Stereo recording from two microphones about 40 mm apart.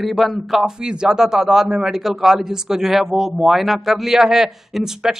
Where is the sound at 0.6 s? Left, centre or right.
Right.